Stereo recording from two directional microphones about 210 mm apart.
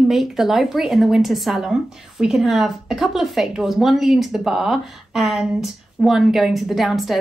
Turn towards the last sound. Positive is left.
turn(degrees=0)  # may be behind; listen again after turning